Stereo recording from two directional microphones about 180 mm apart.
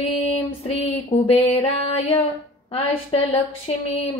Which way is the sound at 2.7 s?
30° left (ahead or behind).